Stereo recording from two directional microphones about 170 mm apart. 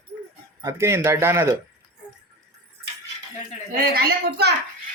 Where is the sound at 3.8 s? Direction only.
70° right (ahead or behind).